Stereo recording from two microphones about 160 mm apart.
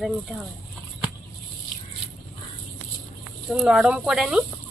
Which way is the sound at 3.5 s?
5° right (ahead or behind).